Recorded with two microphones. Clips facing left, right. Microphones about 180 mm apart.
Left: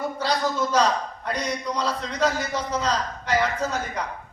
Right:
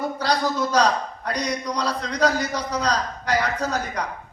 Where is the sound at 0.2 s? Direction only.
40° right (ahead or behind).